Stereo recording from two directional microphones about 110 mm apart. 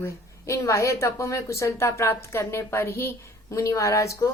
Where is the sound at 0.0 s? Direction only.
30° left (ahead or behind).